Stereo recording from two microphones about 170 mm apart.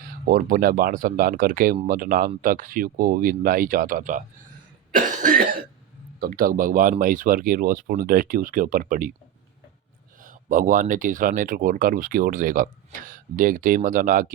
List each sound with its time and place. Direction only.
0.3 s speech: 55° right (ahead or behind)
10.2 s speech: 50° right (ahead or behind)